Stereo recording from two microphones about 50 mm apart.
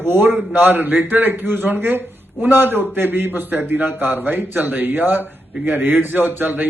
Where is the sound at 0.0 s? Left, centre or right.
Right.